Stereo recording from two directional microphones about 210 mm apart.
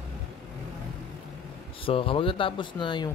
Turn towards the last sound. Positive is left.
turn(degrees=20)  # may be behind; listen again after turning